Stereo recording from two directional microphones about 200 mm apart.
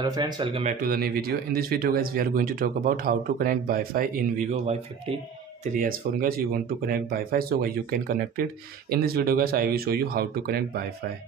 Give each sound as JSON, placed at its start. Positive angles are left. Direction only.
{"t": 0.0, "sound": "speech", "side_deg": -20}
{"t": 0.7, "sound": "speech", "side_deg": -45}
{"t": 5.8, "sound": "speech", "side_deg": -45}